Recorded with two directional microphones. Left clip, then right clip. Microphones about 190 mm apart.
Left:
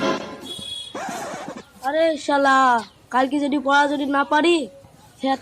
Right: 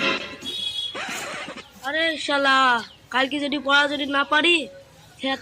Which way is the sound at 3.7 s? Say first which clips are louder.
Left 1 dB; 65° left (ahead or behind).